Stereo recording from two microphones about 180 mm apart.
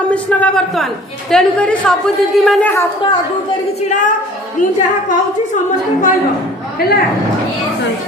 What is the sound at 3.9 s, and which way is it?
Speech, 45° left (ahead or behind).